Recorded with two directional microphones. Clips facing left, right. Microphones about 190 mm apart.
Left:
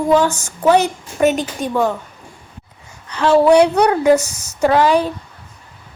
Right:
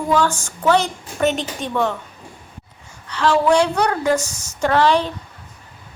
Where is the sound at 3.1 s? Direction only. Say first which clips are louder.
Left 5 dB; 15° left (ahead or behind).